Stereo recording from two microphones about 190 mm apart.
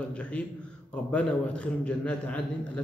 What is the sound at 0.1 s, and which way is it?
A man's voice, 5° left (ahead or behind).